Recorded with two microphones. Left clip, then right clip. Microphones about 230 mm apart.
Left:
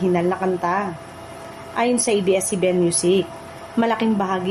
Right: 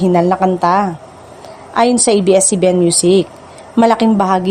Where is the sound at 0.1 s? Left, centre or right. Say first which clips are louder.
Right 9 dB; right.